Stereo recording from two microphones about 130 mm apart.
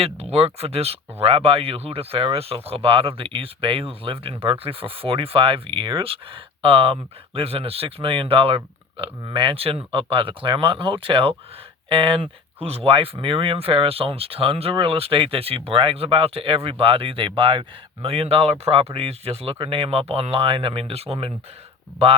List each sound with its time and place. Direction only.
0.0 s speech: 50° right (ahead or behind)